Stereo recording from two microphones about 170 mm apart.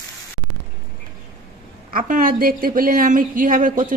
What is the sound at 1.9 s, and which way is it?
A woman's voice, 55° right (ahead or behind).